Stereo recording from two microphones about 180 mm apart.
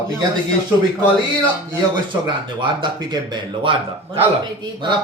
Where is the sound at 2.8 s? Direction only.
25° right (ahead or behind).